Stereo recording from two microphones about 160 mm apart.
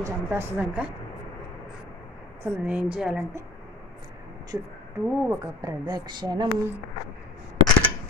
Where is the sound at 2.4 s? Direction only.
10° right (ahead or behind).